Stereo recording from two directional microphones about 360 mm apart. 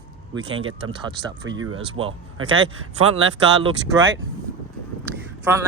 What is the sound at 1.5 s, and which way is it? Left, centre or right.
Speech, right.